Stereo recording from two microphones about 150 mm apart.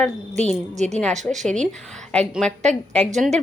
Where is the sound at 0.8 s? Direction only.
50° right (ahead or behind).